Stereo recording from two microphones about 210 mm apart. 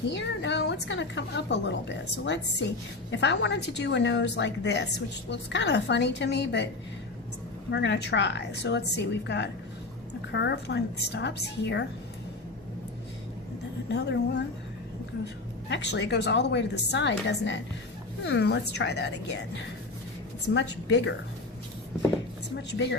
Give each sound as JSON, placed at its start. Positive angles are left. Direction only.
{"t": 0.2, "sound": "a woman's voice", "side_deg": 60}
{"t": 7.7, "sound": "a woman's voice", "side_deg": 55}
{"t": 13.8, "sound": "a woman's voice", "side_deg": 55}
{"t": 15.7, "sound": "a woman's voice", "side_deg": 55}
{"t": 22.5, "sound": "a woman's voice", "side_deg": 55}